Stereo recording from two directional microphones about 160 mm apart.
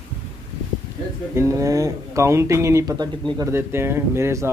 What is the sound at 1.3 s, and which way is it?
Speech, 20° right (ahead or behind).